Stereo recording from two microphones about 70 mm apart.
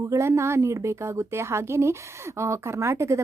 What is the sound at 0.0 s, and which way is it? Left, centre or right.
A woman's voice, right.